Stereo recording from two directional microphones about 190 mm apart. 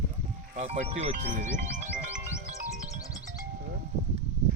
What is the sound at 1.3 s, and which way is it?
Music, 40° right (ahead or behind).